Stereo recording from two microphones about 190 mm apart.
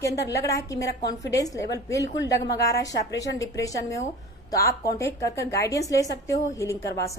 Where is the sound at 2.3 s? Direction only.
15° left (ahead or behind).